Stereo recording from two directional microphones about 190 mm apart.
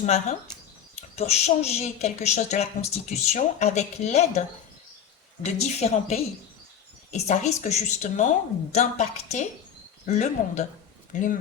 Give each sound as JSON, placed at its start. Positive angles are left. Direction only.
{"t": 0.0, "sound": "a woman's voice", "side_deg": 35}
{"t": 5.5, "sound": "a woman's voice", "side_deg": 35}